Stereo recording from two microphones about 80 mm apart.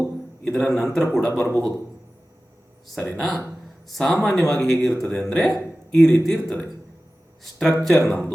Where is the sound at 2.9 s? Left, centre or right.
Centre.